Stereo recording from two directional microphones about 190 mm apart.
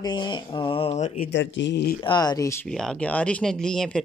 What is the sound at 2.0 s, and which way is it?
Speech, 20° left (ahead or behind).